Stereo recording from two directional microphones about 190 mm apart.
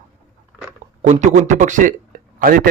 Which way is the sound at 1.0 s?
40° right (ahead or behind).